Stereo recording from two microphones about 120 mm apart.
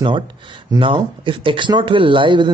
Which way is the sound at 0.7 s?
45° right (ahead or behind).